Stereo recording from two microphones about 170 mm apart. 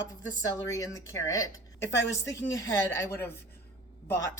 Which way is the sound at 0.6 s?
15° left (ahead or behind).